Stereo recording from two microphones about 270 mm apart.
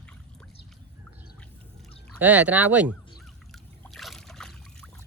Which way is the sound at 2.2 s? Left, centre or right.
Centre.